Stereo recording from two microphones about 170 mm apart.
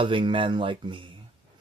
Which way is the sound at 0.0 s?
30° right (ahead or behind).